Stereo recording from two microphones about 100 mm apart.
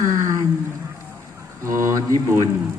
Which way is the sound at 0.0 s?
35° right (ahead or behind).